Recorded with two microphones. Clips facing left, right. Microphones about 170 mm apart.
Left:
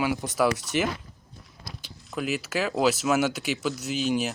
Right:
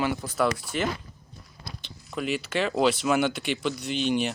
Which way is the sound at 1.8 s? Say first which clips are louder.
Even; centre (ahead or behind).